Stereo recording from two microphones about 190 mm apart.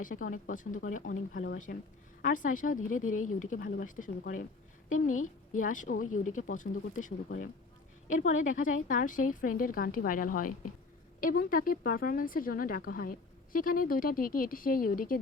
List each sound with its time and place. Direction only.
0.0 s speech: 45° left (ahead or behind)
5.0 s a woman's voice: 90° left
5.5 s speech: 45° left (ahead or behind)